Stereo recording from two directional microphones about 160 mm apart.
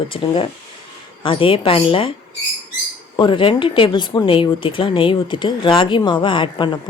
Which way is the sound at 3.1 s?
30° left (ahead or behind).